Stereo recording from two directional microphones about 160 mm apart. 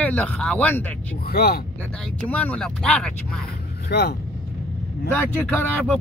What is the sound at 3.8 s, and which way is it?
Speech, 90° left.